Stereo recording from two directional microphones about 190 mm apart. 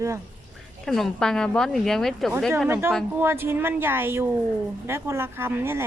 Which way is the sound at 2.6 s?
10° right (ahead or behind).